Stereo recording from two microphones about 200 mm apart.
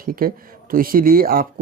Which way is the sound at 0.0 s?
45° right (ahead or behind).